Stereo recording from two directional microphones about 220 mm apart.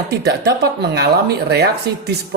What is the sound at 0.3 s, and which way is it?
Speech, 45° right (ahead or behind).